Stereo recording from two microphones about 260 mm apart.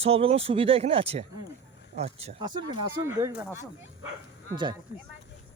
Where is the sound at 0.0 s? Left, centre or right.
Right.